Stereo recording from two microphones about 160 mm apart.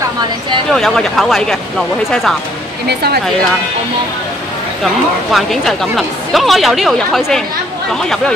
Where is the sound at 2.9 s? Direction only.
85° right.